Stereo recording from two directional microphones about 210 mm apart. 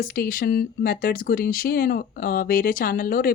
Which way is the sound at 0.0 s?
45° left (ahead or behind).